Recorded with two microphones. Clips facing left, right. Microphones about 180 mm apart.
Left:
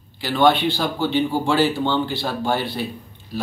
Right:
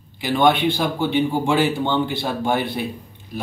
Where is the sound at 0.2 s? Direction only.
15° right (ahead or behind).